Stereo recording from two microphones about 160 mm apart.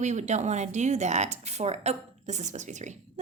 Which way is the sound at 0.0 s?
45° right (ahead or behind).